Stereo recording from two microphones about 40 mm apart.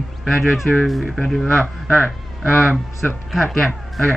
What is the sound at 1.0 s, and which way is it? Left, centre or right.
Speech, centre.